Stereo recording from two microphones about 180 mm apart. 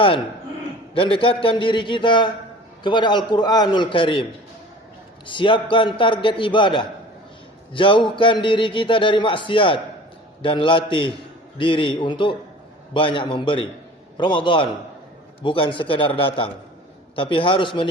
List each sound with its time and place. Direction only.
0.9 s a man's voice: 30° left (ahead or behind)